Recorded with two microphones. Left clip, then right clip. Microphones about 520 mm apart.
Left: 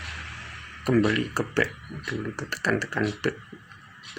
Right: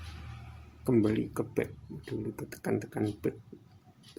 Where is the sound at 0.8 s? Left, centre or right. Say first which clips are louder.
Left 5 dB; right.